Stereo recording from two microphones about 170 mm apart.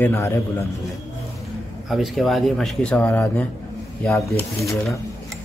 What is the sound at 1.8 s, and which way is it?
A man's voice, centre (ahead or behind).